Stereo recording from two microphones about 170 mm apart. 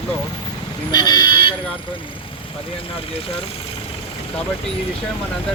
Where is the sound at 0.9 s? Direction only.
25° left (ahead or behind).